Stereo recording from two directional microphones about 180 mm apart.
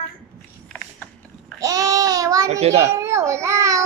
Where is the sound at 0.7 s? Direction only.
5° left (ahead or behind).